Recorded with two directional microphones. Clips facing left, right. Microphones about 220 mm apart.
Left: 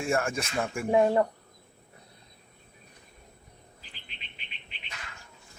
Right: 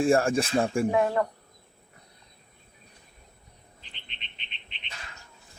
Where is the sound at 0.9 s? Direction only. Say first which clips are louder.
Left 2 dB; 25° left (ahead or behind).